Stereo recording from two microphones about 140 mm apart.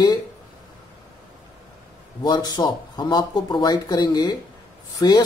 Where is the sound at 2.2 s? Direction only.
30° left (ahead or behind).